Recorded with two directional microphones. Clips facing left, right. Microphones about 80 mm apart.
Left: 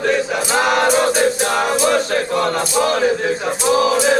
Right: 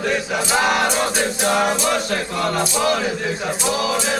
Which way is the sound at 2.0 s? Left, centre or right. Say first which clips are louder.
Left 4 dB; left.